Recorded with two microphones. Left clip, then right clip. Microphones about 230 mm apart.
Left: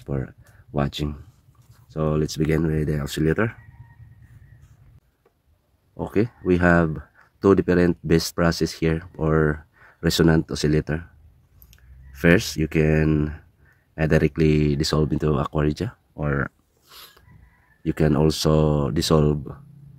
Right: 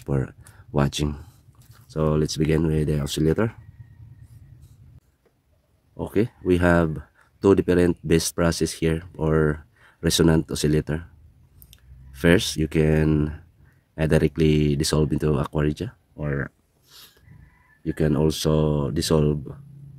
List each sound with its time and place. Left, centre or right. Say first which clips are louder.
0.0 s speech: right 3 dB; centre
5.9 s speech: left 1 dB; centre